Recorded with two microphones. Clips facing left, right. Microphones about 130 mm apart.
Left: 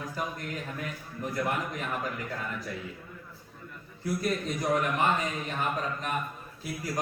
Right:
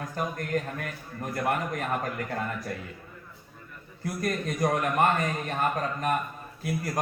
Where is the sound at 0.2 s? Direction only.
50° right (ahead or behind).